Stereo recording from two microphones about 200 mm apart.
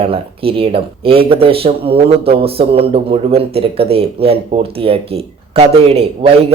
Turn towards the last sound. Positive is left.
turn(degrees=-30)  # may be behind; listen again after turning